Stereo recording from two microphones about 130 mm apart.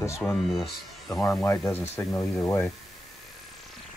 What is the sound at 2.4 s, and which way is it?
Speech, 15° left (ahead or behind).